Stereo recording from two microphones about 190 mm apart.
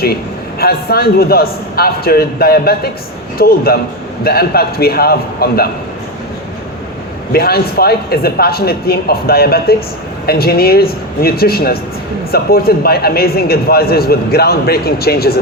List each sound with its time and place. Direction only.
0.6 s a man's voice: 55° left (ahead or behind)
7.3 s a man's voice: 55° left (ahead or behind)